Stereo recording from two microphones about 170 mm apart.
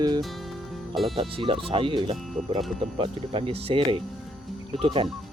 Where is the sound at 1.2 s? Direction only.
30° right (ahead or behind).